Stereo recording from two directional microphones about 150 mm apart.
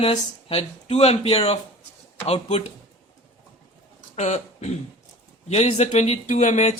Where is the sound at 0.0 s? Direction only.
40° left (ahead or behind).